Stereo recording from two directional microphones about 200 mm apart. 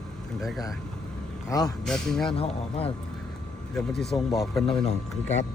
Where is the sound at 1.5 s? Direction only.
20° left (ahead or behind).